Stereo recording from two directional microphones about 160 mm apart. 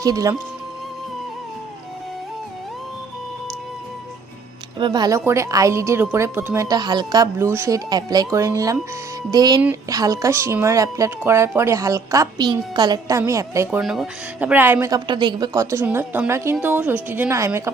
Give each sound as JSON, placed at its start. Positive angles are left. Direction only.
{"t": 0.0, "sound": "speech", "side_deg": -20}
{"t": 4.8, "sound": "speech", "side_deg": -25}
{"t": 13.7, "sound": "a woman's voice", "side_deg": 0}
{"t": 14.9, "sound": "a woman's voice", "side_deg": -30}